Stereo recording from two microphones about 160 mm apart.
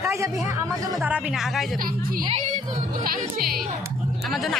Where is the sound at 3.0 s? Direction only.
65° right (ahead or behind).